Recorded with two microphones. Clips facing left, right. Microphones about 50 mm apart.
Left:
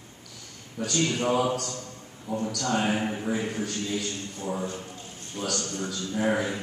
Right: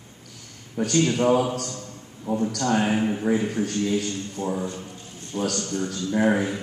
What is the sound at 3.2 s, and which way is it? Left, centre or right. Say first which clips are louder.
A man's voice: right 6 dB; right.